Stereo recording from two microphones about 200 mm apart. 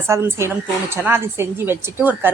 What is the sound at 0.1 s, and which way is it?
Speech, 15° right (ahead or behind).